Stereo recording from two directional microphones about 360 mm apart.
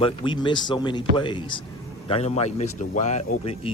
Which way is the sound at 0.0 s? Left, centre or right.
Centre.